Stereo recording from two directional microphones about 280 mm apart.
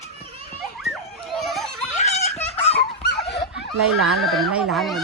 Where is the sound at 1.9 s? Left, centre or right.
Left.